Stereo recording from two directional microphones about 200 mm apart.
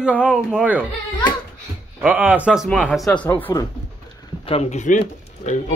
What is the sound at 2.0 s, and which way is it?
Speech, 10° right (ahead or behind).